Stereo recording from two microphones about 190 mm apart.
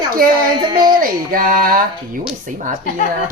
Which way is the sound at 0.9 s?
45° right (ahead or behind).